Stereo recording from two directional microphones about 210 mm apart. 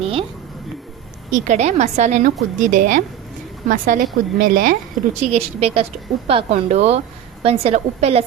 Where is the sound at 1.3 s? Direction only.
35° right (ahead or behind).